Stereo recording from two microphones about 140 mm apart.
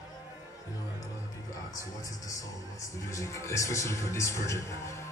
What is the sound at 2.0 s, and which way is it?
Speech, 25° left (ahead or behind).